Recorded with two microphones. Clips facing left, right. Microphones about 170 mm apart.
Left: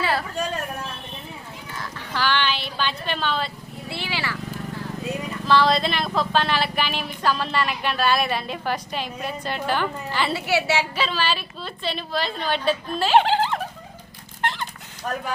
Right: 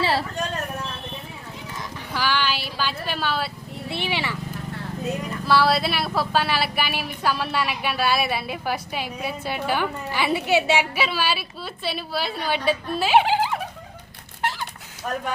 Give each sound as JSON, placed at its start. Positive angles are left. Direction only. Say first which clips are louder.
{"t": 0.0, "sound": "a sound", "louder": "right 1 dB", "side_deg": -30}
{"t": 1.8, "sound": "speech", "louder": "left 1 dB", "side_deg": -10}
{"t": 3.8, "sound": "speech", "louder": "right 2 dB", "side_deg": -20}
{"t": 5.5, "sound": "speech", "louder": "left 1 dB", "side_deg": -5}
{"t": 14.4, "sound": "a sound", "louder": "even", "side_deg": -5}
{"t": 15.1, "sound": "speech", "louder": "even", "side_deg": 0}